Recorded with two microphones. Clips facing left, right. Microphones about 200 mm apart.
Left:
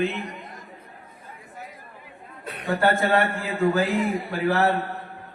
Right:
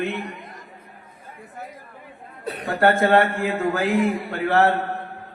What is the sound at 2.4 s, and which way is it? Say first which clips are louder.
Chuckle: right 7 dB; 35° right (ahead or behind).